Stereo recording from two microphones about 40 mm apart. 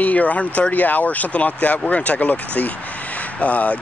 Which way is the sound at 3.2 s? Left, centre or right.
Left.